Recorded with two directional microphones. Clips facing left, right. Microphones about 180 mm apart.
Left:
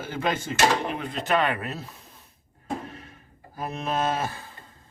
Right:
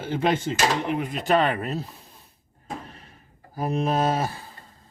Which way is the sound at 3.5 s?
35° right (ahead or behind).